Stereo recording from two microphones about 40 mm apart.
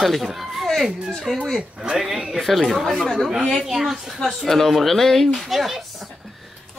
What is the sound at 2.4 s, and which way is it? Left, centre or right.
Speech, centre.